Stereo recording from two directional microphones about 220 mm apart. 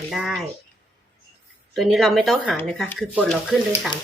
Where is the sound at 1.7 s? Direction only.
Centre (ahead or behind).